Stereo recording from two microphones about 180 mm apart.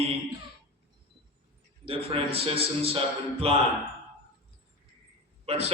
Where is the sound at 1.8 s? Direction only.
30° right (ahead or behind).